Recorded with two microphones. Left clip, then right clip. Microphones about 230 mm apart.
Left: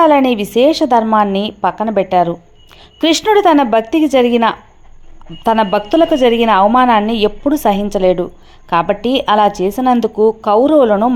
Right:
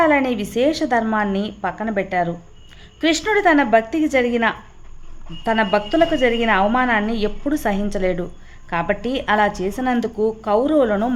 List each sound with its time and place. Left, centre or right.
0.0 s a woman's voice: left